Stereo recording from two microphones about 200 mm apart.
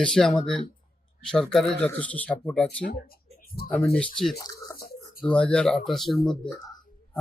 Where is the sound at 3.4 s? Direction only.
50° left (ahead or behind).